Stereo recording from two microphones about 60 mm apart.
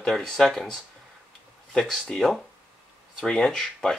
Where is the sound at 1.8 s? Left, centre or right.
Centre.